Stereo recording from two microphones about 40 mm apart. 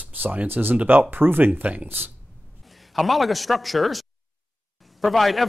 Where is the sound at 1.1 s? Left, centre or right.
Right.